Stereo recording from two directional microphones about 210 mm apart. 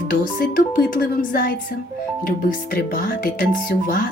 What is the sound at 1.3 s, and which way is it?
Speech, 40° left (ahead or behind).